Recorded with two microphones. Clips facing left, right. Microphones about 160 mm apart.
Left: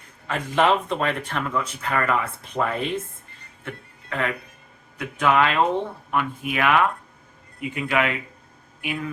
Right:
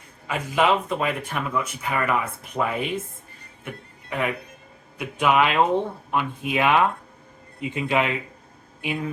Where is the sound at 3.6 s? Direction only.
15° right (ahead or behind).